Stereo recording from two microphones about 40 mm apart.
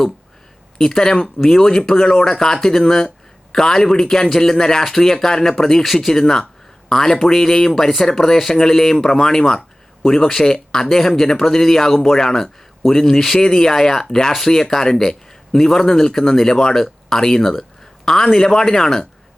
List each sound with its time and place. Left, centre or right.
0.8 s a man's voice: centre